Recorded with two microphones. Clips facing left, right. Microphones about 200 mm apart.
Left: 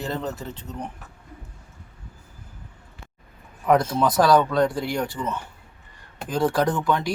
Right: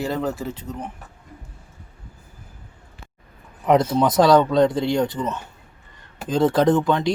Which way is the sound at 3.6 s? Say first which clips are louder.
Right 2 dB; 20° right (ahead or behind).